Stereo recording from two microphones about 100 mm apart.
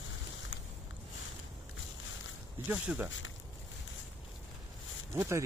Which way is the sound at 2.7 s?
15° right (ahead or behind).